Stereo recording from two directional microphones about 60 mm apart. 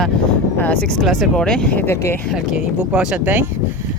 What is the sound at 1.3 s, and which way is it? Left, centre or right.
Speech, centre.